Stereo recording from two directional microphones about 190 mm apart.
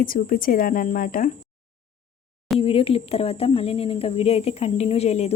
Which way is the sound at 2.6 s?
30° left (ahead or behind).